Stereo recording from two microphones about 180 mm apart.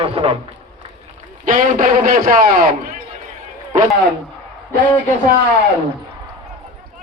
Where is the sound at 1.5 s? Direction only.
45° right (ahead or behind).